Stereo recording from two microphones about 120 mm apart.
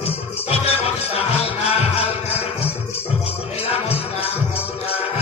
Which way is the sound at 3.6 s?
55° left (ahead or behind).